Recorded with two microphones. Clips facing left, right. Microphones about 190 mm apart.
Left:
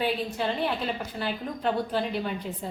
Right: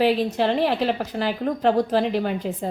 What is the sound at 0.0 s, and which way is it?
Speech, 90° right.